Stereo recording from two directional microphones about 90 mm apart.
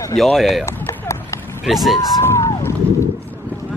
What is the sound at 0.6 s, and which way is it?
Speech, 30° left (ahead or behind).